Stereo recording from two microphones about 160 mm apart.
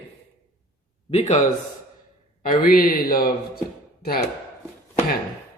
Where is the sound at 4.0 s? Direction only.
70° left (ahead or behind).